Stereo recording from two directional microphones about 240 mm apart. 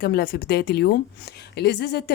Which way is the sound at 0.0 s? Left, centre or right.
Left.